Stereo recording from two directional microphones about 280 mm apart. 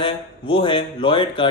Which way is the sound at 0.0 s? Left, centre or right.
Centre.